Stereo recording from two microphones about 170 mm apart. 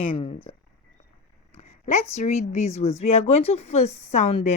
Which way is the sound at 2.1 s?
40° left (ahead or behind).